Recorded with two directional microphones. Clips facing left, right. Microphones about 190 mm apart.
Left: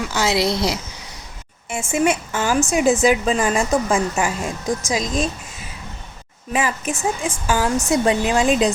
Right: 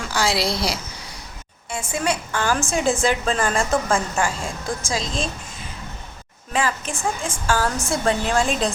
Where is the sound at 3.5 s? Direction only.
15° left (ahead or behind).